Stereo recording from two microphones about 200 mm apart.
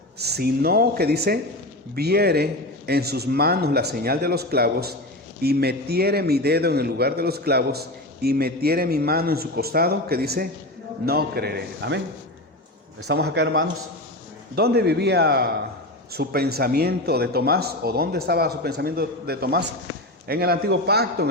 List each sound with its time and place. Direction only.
0.2 s a man's voice: 55° right (ahead or behind)
13.1 s a man's voice: 55° right (ahead or behind)